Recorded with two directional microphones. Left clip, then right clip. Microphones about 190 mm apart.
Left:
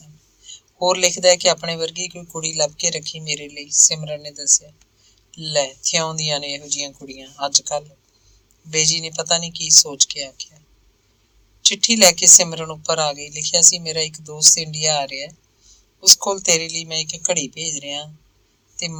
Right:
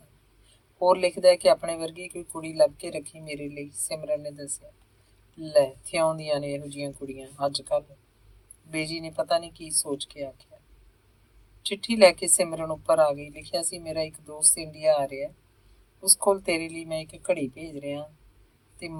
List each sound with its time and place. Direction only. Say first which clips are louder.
0.8 s speech: left 4 dB; 25° left (ahead or behind)
11.7 s speech: left 3 dB; 25° left (ahead or behind)